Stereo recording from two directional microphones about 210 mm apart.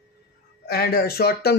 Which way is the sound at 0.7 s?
45° left (ahead or behind).